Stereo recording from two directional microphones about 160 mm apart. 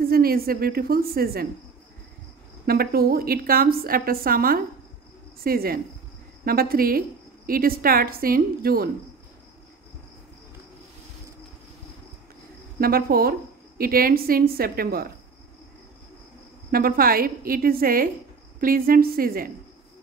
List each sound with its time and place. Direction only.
0.0 s a woman's voice: 70° right (ahead or behind)
2.6 s a woman's voice: 70° right (ahead or behind)
12.8 s a woman's voice: 70° right (ahead or behind)
16.7 s a woman's voice: 65° right (ahead or behind)